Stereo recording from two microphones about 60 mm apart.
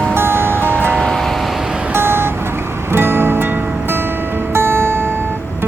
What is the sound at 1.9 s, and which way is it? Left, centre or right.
Vehicle, right.